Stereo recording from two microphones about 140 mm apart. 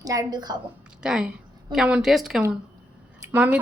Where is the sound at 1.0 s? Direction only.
5° right (ahead or behind).